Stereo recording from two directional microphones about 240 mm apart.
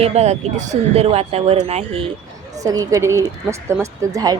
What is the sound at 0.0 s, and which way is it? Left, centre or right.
Speech, right.